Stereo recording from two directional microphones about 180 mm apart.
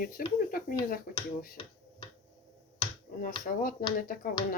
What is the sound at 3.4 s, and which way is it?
Speech, 50° left (ahead or behind).